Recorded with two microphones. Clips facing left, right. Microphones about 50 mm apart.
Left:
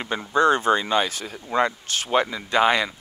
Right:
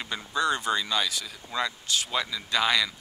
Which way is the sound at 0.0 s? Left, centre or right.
Left.